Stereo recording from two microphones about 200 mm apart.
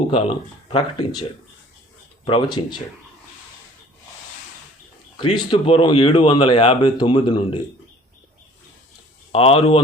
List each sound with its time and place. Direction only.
0.1 s speech: 25° left (ahead or behind)
2.2 s speech: 25° left (ahead or behind)
5.1 s speech: 20° left (ahead or behind)
9.3 s speech: 30° left (ahead or behind)